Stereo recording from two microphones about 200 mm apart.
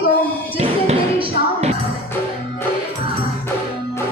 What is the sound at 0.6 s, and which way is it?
Music, 30° right (ahead or behind).